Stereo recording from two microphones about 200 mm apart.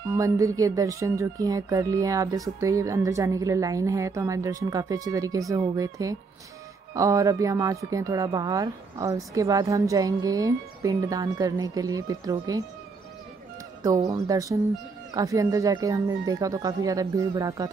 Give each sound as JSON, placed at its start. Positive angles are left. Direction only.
{"t": 0.1, "sound": "speech", "side_deg": -15}
{"t": 13.8, "sound": "speech", "side_deg": -15}